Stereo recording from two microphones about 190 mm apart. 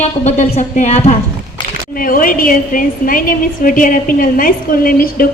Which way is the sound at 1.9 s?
50° left (ahead or behind).